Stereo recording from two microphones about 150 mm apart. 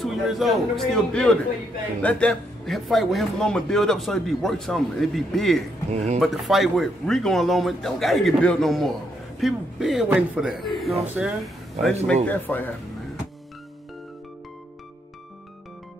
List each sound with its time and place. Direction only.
0.0 s speech: centre (ahead or behind)
5.9 s speech: 45° right (ahead or behind)
6.1 s speech: centre (ahead or behind)
12.3 s speech: 10° left (ahead or behind)